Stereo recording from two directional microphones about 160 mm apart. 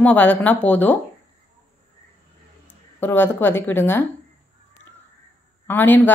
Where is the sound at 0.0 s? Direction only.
10° left (ahead or behind).